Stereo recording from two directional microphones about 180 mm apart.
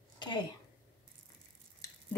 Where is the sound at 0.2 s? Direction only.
25° left (ahead or behind).